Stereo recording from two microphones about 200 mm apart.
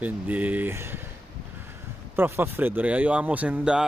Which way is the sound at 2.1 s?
10° right (ahead or behind).